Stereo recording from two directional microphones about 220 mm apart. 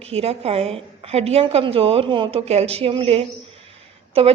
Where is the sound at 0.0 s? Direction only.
30° right (ahead or behind).